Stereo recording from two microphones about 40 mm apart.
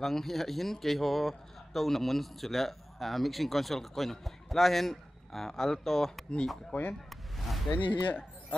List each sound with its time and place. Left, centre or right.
0.0 s speech: centre
6.7 s speech: left
7.3 s a sound: centre
7.7 s speech: left